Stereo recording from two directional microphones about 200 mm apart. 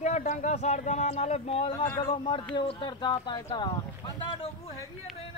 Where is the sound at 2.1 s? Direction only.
30° left (ahead or behind).